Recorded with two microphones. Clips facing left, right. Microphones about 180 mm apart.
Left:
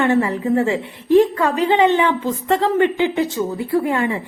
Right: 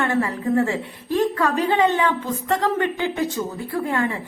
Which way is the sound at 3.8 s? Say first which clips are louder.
Left 3 dB; 15° left (ahead or behind).